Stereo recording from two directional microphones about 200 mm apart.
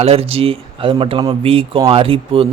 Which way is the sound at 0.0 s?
30° right (ahead or behind).